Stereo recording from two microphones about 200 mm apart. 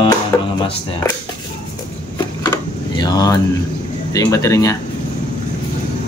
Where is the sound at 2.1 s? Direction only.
20° left (ahead or behind).